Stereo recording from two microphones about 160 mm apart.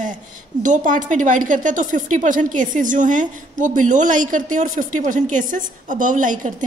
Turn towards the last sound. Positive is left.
turn(degrees=-55)  # may be behind; listen again after turning